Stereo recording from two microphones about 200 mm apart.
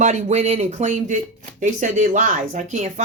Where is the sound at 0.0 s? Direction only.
35° right (ahead or behind).